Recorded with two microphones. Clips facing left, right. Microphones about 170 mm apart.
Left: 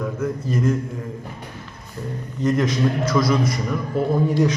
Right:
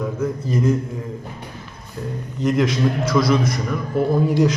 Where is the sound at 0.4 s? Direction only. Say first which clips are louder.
Right 1 dB; 15° right (ahead or behind).